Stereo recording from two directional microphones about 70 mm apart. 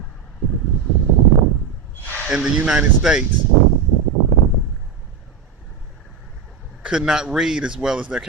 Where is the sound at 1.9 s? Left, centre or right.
Left.